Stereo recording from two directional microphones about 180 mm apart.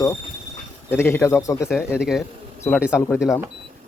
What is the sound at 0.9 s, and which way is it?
Speech, 10° left (ahead or behind).